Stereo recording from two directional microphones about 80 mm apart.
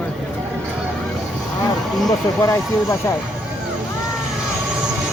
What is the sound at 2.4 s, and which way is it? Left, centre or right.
Speech, left.